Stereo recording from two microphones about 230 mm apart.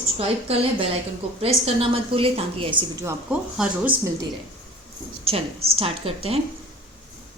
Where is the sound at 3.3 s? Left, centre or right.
Centre.